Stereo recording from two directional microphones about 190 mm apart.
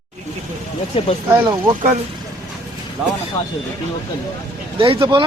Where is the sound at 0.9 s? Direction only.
30° left (ahead or behind).